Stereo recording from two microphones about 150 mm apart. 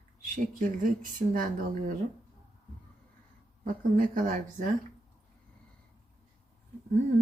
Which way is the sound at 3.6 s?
60° right (ahead or behind).